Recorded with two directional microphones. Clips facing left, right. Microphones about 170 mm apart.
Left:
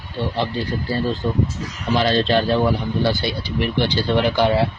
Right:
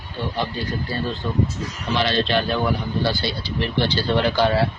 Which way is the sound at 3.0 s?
15° left (ahead or behind).